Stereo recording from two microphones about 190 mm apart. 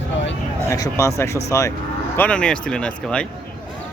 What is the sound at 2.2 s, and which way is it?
Speech, 5° left (ahead or behind).